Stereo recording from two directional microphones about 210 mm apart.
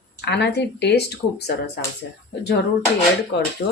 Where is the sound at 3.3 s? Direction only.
55° left (ahead or behind).